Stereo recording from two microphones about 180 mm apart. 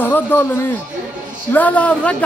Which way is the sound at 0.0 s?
10° left (ahead or behind).